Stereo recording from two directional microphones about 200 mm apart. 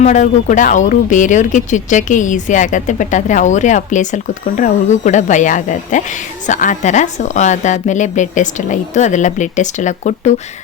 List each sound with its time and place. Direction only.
0.0 s speech: 35° left (ahead or behind)